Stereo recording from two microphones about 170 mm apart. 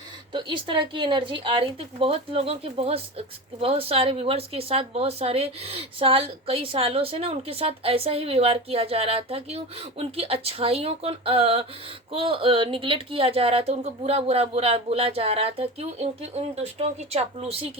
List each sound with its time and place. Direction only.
0.3 s a woman's voice: 30° right (ahead or behind)